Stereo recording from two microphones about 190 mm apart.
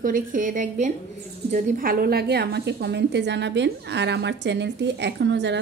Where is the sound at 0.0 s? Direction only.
45° right (ahead or behind).